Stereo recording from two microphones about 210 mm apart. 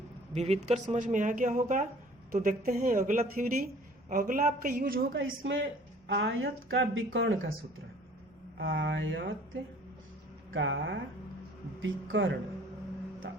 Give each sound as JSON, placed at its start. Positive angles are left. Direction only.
{"t": 0.3, "sound": "speech", "side_deg": -30}
{"t": 5.4, "sound": "a woman's voice", "side_deg": -60}
{"t": 8.5, "sound": "a woman's voice", "side_deg": -60}
{"t": 10.5, "sound": "a woman's voice", "side_deg": -65}